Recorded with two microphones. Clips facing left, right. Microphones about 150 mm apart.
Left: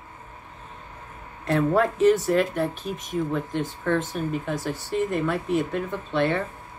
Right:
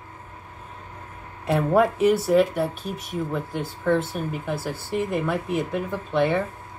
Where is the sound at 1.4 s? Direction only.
10° right (ahead or behind).